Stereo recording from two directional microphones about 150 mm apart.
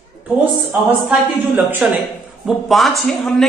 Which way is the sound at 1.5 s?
15° right (ahead or behind).